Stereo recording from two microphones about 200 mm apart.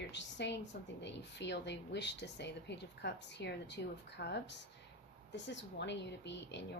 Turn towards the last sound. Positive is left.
turn(degrees=60)  # may be behind; listen again after turning